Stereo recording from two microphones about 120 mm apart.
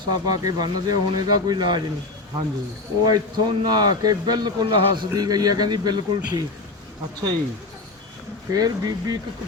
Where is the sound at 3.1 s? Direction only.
35° right (ahead or behind).